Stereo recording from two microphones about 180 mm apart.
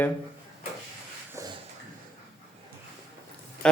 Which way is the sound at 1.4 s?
15° right (ahead or behind).